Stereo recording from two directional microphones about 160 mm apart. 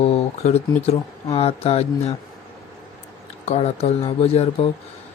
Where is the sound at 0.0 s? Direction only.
40° left (ahead or behind).